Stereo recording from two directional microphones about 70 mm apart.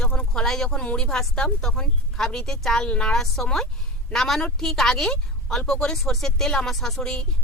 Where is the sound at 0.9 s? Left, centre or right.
Centre.